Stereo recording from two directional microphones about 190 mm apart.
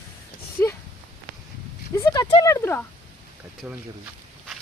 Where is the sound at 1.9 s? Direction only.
15° left (ahead or behind).